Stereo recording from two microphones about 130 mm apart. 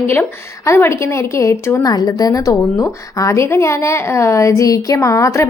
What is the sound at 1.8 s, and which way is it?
A woman's voice, 30° left (ahead or behind).